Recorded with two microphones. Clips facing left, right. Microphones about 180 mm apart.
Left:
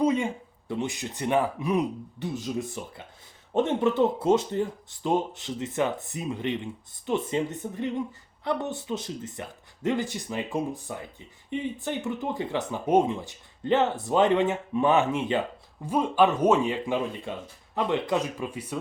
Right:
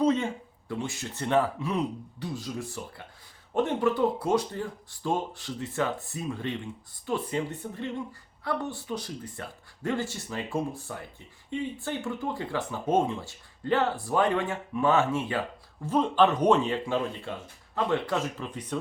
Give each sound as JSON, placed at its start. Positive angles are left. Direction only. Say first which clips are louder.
{"t": 0.0, "sound": "a sound", "louder": "left 1 dB", "side_deg": 10}
{"t": 0.7, "sound": "speech", "louder": "left 3 dB", "side_deg": 20}
{"t": 16.8, "sound": "speech", "louder": "left 1 dB", "side_deg": 15}